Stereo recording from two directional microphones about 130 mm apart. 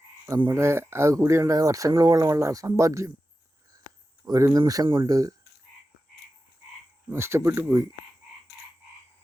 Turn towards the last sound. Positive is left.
turn(degrees=-20)  # may be behind; listen again after turning